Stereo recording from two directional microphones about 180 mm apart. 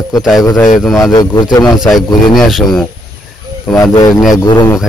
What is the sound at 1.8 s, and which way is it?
Speech, centre (ahead or behind).